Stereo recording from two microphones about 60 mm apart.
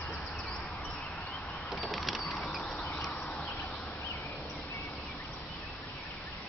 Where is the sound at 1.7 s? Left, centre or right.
Centre.